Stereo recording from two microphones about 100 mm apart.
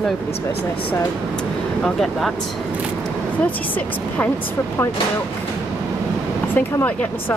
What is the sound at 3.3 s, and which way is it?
Speech, 15° left (ahead or behind).